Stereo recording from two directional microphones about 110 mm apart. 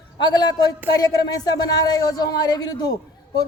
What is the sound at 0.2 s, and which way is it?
Speech, 40° left (ahead or behind).